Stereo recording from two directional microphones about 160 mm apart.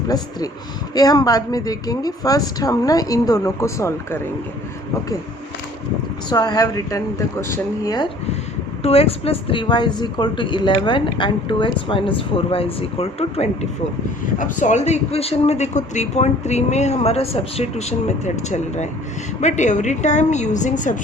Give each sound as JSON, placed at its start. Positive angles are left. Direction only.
{"t": 0.1, "sound": "a woman's voice", "side_deg": 25}
{"t": 6.2, "sound": "a woman's voice", "side_deg": 25}
{"t": 8.8, "sound": "speech", "side_deg": 40}
{"t": 14.3, "sound": "speech", "side_deg": 55}